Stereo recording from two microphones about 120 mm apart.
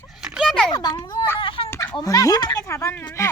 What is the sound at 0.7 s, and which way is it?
Speech, 35° left (ahead or behind).